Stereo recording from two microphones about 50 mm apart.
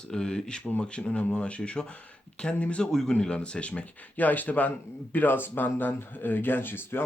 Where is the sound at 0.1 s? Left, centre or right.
Centre.